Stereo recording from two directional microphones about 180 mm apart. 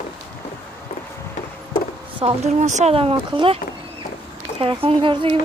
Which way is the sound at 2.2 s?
40° right (ahead or behind).